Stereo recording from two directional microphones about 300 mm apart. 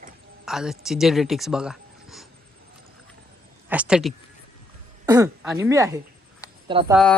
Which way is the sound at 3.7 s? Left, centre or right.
Centre.